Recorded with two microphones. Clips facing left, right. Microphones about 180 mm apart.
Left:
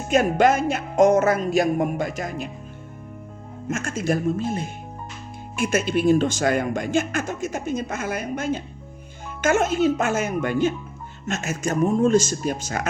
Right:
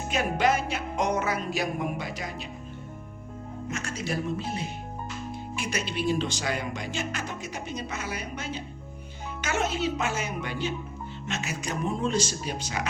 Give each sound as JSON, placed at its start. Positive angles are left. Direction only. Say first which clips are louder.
{"t": 0.1, "sound": "speech", "louder": "left 7 dB", "side_deg": 45}
{"t": 3.7, "sound": "speech", "louder": "left 9 dB", "side_deg": 50}